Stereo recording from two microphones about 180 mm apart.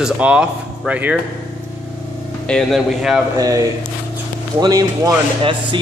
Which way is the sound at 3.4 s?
20° right (ahead or behind).